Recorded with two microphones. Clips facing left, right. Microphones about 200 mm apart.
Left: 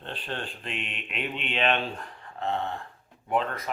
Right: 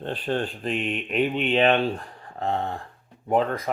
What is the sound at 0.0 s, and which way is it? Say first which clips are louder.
Speech: right 9 dB; 40° right (ahead or behind).